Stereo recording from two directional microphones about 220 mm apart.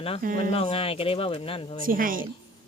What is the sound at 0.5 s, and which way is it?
Speech, 25° left (ahead or behind).